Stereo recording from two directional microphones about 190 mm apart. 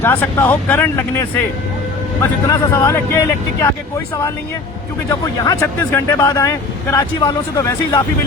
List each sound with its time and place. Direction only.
0.0 s speech: 10° left (ahead or behind)
2.5 s speech: 15° left (ahead or behind)
5.2 s speech: 15° left (ahead or behind)